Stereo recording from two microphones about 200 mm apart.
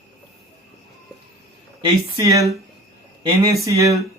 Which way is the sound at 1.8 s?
15° right (ahead or behind).